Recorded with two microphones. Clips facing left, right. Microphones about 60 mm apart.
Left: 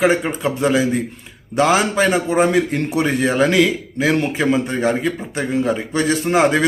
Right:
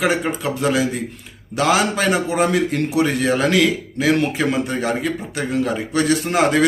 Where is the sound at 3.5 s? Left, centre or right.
Left.